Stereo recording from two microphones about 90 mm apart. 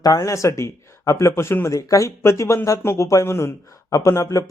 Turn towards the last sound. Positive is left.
turn(degrees=40)  # may be behind; listen again after turning